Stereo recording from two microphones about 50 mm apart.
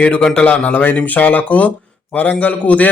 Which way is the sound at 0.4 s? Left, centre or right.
Left.